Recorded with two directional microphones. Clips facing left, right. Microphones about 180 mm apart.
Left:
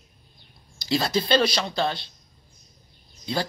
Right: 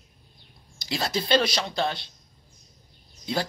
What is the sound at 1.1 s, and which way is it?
Speech, 10° right (ahead or behind).